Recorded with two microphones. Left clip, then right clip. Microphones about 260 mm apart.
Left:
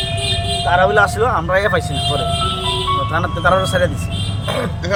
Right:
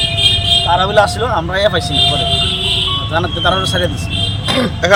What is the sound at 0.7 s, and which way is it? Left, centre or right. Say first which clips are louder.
Speech: left 3 dB; left.